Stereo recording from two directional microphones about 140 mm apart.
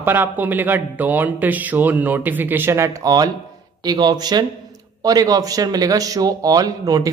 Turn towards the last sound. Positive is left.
turn(degrees=-25)  # may be behind; listen again after turning